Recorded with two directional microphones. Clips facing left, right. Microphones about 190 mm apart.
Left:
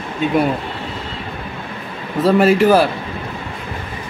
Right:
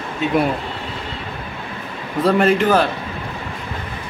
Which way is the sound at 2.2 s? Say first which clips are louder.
Left 3 dB; 5° left (ahead or behind).